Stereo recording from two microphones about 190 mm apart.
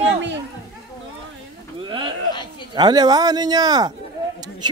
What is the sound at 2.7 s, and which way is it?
Speech, 20° right (ahead or behind).